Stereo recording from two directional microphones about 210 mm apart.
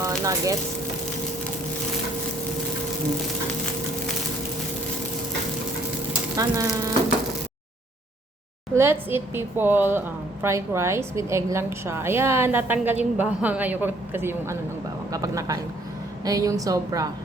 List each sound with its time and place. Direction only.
0.0 s sizzle: 15° right (ahead or behind)
6.3 s a woman's voice: 15° right (ahead or behind)
8.7 s a woman's voice: 10° right (ahead or behind)